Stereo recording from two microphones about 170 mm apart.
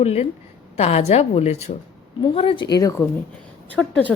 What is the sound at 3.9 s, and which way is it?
Speech, 10° left (ahead or behind).